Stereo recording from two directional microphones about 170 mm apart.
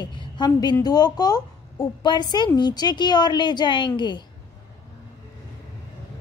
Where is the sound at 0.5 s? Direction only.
20° left (ahead or behind).